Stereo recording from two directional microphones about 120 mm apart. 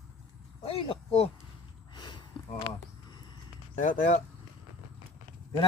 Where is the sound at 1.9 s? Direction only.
40° left (ahead or behind).